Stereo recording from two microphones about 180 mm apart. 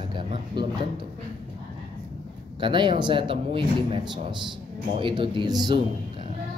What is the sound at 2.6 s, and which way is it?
Speech, 25° right (ahead or behind).